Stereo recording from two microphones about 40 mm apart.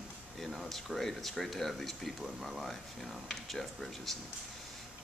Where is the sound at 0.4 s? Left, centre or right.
Centre.